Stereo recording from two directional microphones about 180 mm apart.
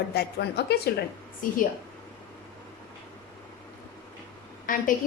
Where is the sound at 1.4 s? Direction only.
50° left (ahead or behind).